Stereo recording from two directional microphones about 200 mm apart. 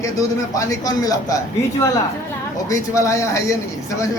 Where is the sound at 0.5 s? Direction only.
15° left (ahead or behind).